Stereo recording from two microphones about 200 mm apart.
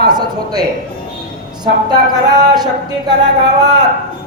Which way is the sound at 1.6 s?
20° right (ahead or behind).